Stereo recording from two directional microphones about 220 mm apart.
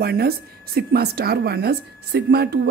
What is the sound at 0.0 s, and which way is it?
A woman's voice, 45° right (ahead or behind).